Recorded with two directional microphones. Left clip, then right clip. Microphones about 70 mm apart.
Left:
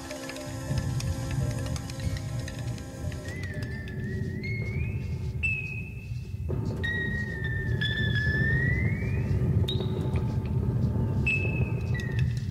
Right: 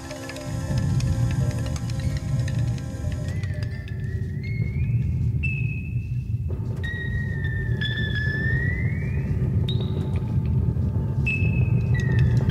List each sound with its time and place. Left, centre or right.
0.7 s music: right
6.9 s music: right
10.7 s a sound: right
12.1 s music: right